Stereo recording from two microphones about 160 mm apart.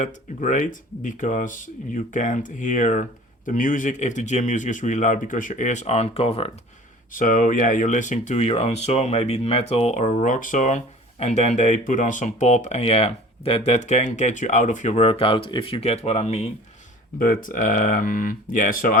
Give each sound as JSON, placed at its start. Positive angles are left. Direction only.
{"t": 0.0, "sound": "speech", "side_deg": 50}
{"t": 7.1, "sound": "speech", "side_deg": 55}
{"t": 17.2, "sound": "speech", "side_deg": 60}